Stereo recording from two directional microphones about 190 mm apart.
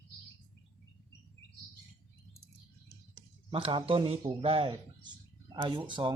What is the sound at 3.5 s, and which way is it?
A man's voice, 30° right (ahead or behind).